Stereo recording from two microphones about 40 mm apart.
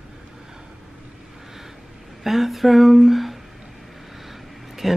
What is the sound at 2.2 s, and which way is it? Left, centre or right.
Speech, centre.